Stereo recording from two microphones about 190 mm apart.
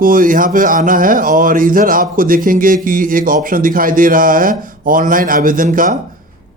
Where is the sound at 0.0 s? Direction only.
45° right (ahead or behind).